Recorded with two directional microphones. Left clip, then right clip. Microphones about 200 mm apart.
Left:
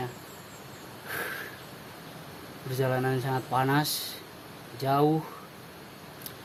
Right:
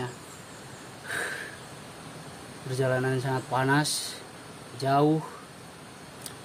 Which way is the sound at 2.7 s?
5° left (ahead or behind).